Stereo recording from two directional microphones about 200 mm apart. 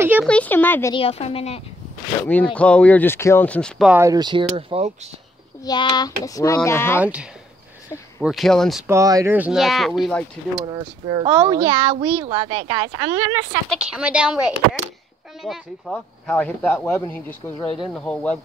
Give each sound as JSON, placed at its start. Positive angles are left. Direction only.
{"t": 0.0, "sound": "a sound", "side_deg": -10}
{"t": 0.3, "sound": "speech", "side_deg": 10}
{"t": 0.9, "sound": "a woman's voice", "side_deg": 30}
{"t": 2.2, "sound": "speech", "side_deg": 5}
{"t": 4.0, "sound": "speech", "side_deg": -20}
{"t": 5.7, "sound": "speech", "side_deg": 20}
{"t": 7.0, "sound": "speech", "side_deg": -5}
{"t": 8.8, "sound": "speech", "side_deg": -15}
{"t": 10.6, "sound": "speech", "side_deg": -25}
{"t": 13.7, "sound": "speech", "side_deg": -5}